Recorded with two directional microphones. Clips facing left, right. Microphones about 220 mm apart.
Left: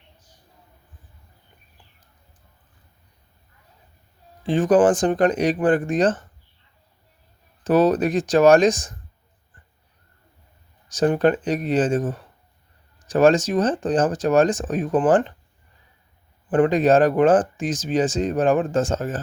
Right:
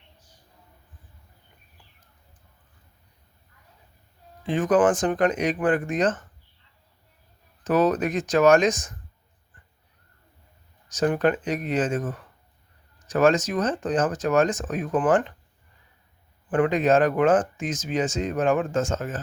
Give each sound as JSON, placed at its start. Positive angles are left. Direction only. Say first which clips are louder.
{"t": 4.4, "sound": "speech", "louder": "left 4 dB", "side_deg": 30}
{"t": 7.6, "sound": "speech", "louder": "left 4 dB", "side_deg": 30}
{"t": 10.8, "sound": "speech", "louder": "left 4 dB", "side_deg": 30}
{"t": 16.5, "sound": "speech", "louder": "left 4 dB", "side_deg": 35}